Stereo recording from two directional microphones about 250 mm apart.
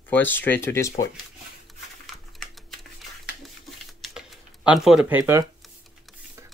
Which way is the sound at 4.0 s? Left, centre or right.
Centre.